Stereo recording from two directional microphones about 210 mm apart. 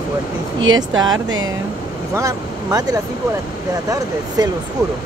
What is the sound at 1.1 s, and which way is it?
Speech, 70° right (ahead or behind).